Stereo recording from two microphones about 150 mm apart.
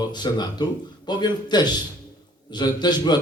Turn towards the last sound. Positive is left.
turn(degrees=30)  # may be behind; listen again after turning